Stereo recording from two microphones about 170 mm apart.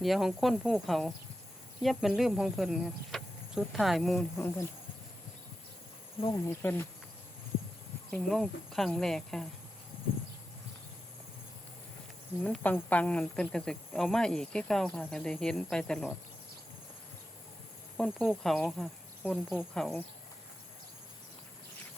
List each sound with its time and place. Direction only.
0.0 s speech: centre (ahead or behind)
4.4 s speech: 15° left (ahead or behind)
6.3 s speech: 15° left (ahead or behind)
8.1 s speech: centre (ahead or behind)
12.4 s speech: 10° left (ahead or behind)
17.9 s speech: 5° left (ahead or behind)